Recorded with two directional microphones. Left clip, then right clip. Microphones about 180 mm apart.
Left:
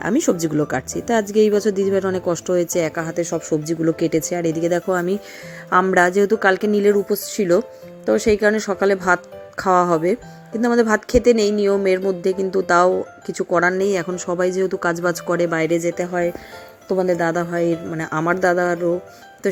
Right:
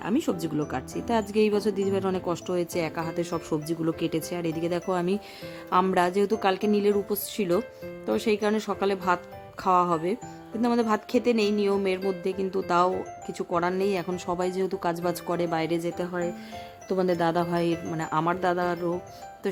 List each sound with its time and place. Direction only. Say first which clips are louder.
0.0 s speech: left 9 dB; 15° left (ahead or behind)
17.1 s speech: left 3 dB; centre (ahead or behind)
18.0 s speech: left 7 dB; 10° left (ahead or behind)